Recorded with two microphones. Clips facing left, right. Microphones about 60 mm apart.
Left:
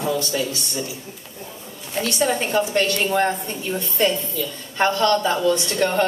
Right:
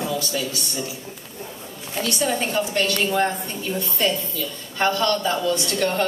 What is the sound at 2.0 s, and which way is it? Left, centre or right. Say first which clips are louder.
A woman's voice: left 2 dB; left.